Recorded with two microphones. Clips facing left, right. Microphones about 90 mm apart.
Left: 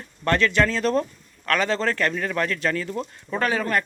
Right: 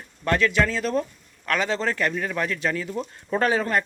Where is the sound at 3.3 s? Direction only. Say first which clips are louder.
Right 1 dB; 30° right (ahead or behind).